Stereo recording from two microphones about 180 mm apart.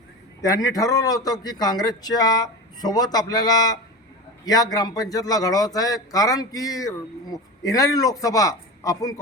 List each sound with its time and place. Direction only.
0.4 s a man's voice: 20° left (ahead or behind)